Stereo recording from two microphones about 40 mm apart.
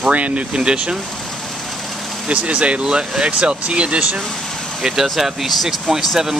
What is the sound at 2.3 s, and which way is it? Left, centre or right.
Speech, right.